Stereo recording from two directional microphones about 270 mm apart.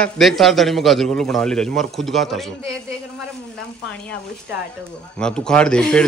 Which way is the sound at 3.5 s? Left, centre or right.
Centre.